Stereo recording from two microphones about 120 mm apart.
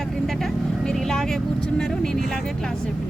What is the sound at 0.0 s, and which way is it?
Speech, centre (ahead or behind).